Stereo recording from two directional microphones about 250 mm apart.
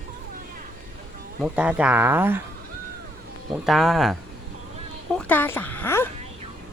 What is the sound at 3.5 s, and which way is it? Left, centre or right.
Speech, centre.